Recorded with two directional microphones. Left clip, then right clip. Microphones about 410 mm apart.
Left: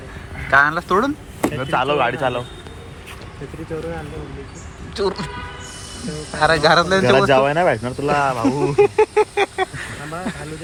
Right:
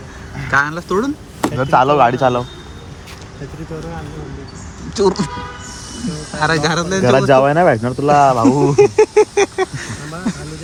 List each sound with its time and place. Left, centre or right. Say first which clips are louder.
0.5 s speech: left 1 dB; centre
1.5 s speech: right 8 dB; centre
4.9 s speech: right 7 dB; centre
6.3 s speech: left 2 dB; centre
7.3 s speech: right 4 dB; right
8.7 s speech: right 2 dB; centre